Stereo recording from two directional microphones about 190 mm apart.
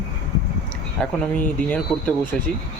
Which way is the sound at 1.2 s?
10° left (ahead or behind).